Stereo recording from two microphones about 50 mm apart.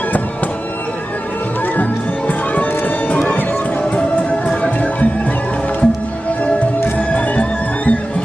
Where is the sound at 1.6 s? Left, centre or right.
Left.